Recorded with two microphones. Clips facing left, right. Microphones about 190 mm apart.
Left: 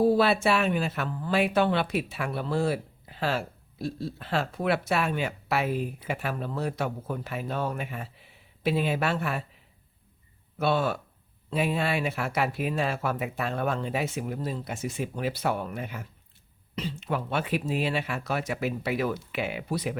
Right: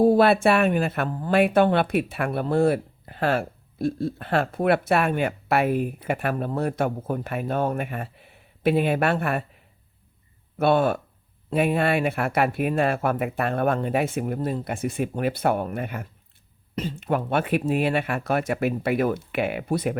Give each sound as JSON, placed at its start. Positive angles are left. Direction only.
{"t": 0.0, "sound": "speech", "side_deg": -50}
{"t": 10.6, "sound": "speech", "side_deg": -50}